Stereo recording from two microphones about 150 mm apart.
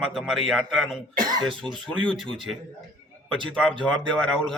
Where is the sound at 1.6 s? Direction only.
5° left (ahead or behind).